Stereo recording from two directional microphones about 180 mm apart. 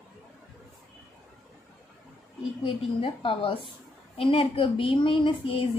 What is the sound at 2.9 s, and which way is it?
A woman's voice, 30° left (ahead or behind).